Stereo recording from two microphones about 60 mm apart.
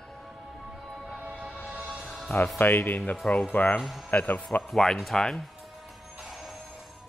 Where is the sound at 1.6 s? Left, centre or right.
Centre.